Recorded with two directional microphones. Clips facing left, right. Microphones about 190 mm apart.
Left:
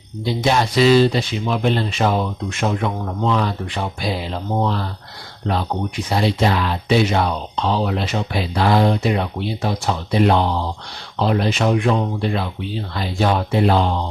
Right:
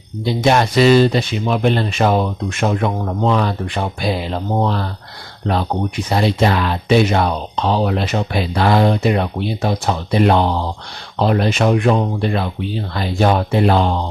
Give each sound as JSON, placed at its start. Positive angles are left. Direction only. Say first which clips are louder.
{"t": 0.4, "sound": "speech", "louder": "right 3 dB", "side_deg": -60}
{"t": 6.1, "sound": "speech", "louder": "right 2 dB", "side_deg": -55}